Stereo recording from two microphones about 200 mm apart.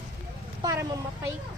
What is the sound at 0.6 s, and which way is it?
Speech, 15° right (ahead or behind).